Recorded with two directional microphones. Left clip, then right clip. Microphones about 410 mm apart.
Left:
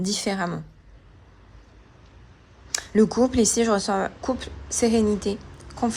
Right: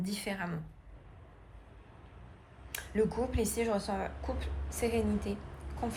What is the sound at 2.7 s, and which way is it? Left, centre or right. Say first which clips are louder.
Speech: left 11 dB; centre.